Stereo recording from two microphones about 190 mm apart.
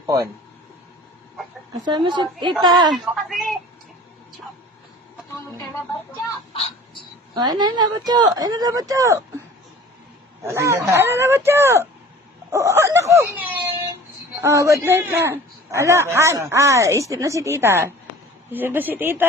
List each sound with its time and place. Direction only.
1.8 s speech: 25° right (ahead or behind)
2.9 s a woman's voice: centre (ahead or behind)
6.5 s fowl: 30° left (ahead or behind)
7.3 s speech: 20° right (ahead or behind)
10.4 s a man's voice: 15° right (ahead or behind)